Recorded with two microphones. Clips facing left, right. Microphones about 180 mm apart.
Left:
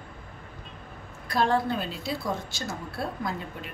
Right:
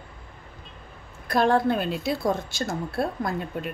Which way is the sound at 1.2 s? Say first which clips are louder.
Right 4 dB; 55° right (ahead or behind).